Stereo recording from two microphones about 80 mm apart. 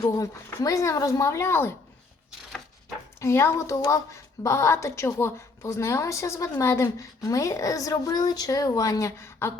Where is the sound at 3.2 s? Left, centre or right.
Left.